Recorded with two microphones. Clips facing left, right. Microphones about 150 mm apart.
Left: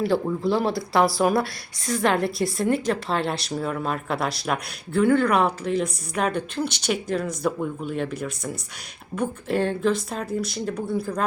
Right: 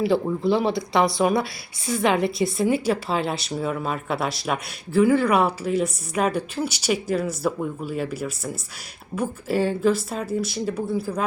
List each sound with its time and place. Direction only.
0.0 s a woman's voice: centre (ahead or behind)